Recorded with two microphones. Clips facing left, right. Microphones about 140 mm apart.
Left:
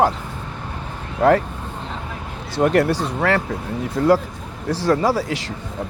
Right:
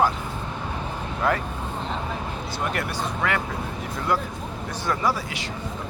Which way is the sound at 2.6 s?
90° left.